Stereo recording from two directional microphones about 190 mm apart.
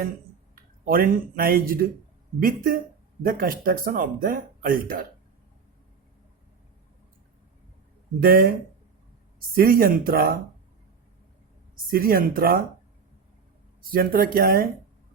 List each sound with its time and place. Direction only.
0.5 s speech: 50° right (ahead or behind)
8.2 s speech: 50° right (ahead or behind)
9.6 s speech: 50° right (ahead or behind)
11.9 s speech: 50° right (ahead or behind)
13.9 s speech: 50° right (ahead or behind)